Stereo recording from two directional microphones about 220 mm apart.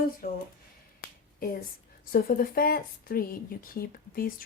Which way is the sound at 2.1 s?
40° left (ahead or behind).